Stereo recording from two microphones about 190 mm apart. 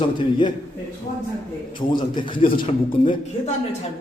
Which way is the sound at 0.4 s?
25° left (ahead or behind).